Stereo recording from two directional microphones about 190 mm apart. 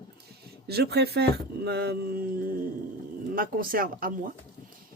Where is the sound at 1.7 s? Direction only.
55° right (ahead or behind).